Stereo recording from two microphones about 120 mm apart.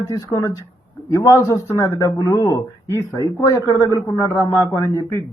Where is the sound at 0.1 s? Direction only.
30° left (ahead or behind).